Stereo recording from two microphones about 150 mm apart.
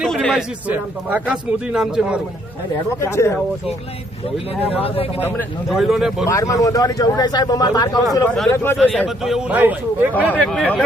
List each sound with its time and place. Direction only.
0.0 s a man's voice: 5° left (ahead or behind)
3.0 s speech: 20° left (ahead or behind)
4.6 s speech: 40° left (ahead or behind)
5.6 s a man's voice: centre (ahead or behind)
6.2 s speech: 20° left (ahead or behind)
8.8 s a man's voice: centre (ahead or behind)
10.3 s a man's voice: 5° left (ahead or behind)